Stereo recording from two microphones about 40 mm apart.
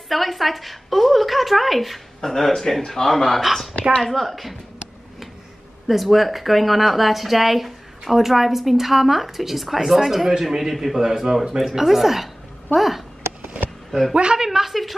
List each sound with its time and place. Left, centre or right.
0.1 s a man's voice: centre
5.9 s speech: centre
13.4 s a sound: right
14.1 s speech: right; by 15.0 s centre